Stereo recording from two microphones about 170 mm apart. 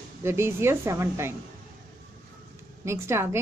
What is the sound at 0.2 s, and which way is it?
A woman's voice, 15° right (ahead or behind).